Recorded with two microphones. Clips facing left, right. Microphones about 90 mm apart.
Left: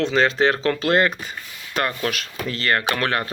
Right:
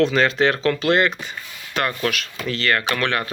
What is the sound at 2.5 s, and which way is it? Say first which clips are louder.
Speech: right 1 dB; 35° left (ahead or behind).